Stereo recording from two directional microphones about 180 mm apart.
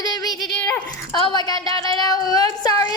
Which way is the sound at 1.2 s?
25° left (ahead or behind).